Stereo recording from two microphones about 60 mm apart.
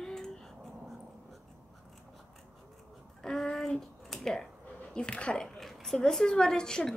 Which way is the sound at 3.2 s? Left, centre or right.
Centre.